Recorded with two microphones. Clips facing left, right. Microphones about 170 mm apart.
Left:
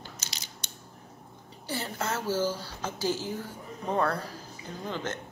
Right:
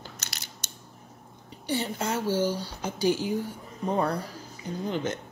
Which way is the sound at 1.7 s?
15° right (ahead or behind).